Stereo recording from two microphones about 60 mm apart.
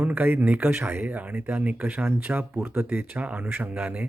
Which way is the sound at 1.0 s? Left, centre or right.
Right.